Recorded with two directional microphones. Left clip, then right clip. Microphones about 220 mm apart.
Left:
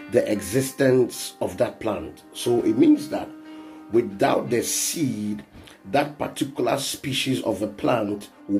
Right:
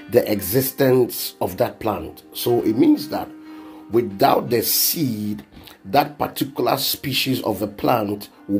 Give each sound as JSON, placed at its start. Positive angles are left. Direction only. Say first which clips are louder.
{"t": 0.1, "sound": "speech", "louder": "right 3 dB", "side_deg": -25}